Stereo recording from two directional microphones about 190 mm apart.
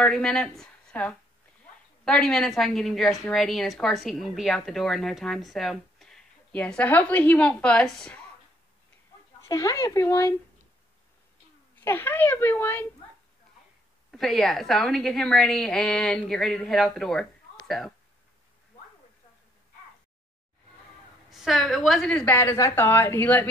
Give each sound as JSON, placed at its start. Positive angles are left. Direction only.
{"t": 0.0, "sound": "a woman's voice", "side_deg": 5}
{"t": 9.4, "sound": "a woman's voice", "side_deg": 20}
{"t": 11.8, "sound": "a woman's voice", "side_deg": 10}
{"t": 14.1, "sound": "a woman's voice", "side_deg": 0}
{"t": 21.3, "sound": "a woman's voice", "side_deg": 0}